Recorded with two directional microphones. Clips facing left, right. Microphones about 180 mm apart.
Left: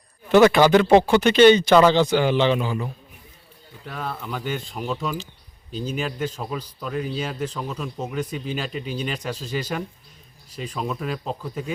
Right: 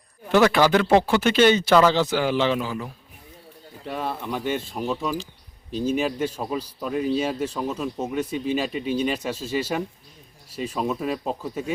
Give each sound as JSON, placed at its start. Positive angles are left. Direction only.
{"t": 0.3, "sound": "speech", "side_deg": 0}
{"t": 3.9, "sound": "speech", "side_deg": -25}
{"t": 4.7, "sound": "speech", "side_deg": -5}